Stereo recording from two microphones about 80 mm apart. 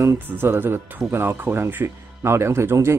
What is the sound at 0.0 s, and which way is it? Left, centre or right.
Speech, right.